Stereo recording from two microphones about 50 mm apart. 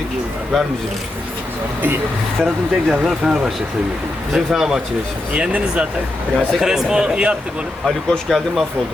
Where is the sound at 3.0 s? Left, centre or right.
Centre.